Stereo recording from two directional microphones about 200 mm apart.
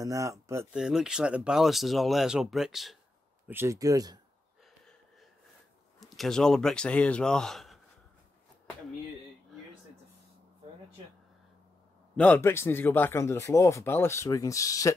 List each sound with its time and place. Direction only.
0.0 s speech: 15° right (ahead or behind)
0.7 s speech: 5° right (ahead or behind)
3.4 s speech: 10° right (ahead or behind)
5.9 s a man's voice: centre (ahead or behind)
12.2 s speech: 10° left (ahead or behind)